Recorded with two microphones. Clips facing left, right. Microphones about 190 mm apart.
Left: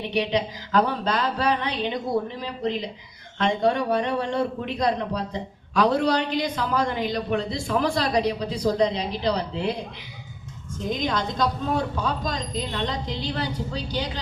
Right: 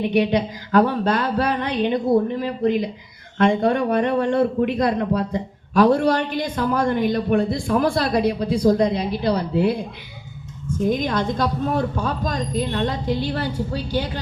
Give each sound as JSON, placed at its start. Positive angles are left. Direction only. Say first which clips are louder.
{"t": 0.1, "sound": "speech", "louder": "right 5 dB", "side_deg": -50}
{"t": 10.8, "sound": "speech", "louder": "right 5 dB", "side_deg": -50}